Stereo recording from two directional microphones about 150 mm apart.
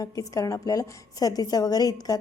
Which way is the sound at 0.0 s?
25° left (ahead or behind).